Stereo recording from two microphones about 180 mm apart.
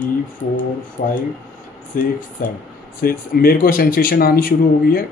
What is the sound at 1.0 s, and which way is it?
Speech, 55° left (ahead or behind).